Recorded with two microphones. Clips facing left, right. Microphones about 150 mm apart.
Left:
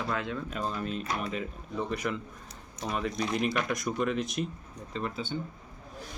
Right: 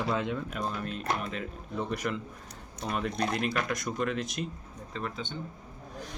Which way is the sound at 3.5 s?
Centre (ahead or behind).